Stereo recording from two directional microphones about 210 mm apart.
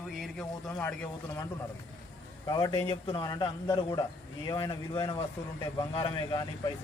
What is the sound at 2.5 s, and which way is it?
A man's voice, 20° left (ahead or behind).